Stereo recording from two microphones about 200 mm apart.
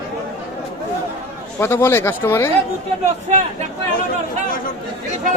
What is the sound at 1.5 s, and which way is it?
Speech, 10° left (ahead or behind).